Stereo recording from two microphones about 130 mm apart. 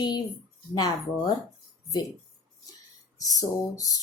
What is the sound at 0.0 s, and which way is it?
Speech, 35° left (ahead or behind).